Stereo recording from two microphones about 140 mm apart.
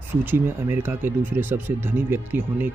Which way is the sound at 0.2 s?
15° right (ahead or behind).